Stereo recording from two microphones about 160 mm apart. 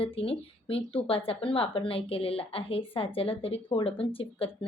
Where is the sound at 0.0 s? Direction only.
35° left (ahead or behind).